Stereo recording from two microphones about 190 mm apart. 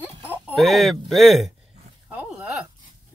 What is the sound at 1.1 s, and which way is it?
Speech, centre (ahead or behind).